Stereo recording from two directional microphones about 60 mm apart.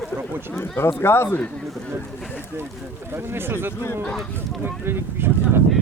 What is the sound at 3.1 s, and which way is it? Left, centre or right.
Speech, right.